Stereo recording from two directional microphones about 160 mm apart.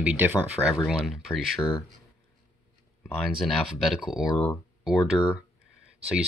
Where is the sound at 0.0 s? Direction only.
10° right (ahead or behind).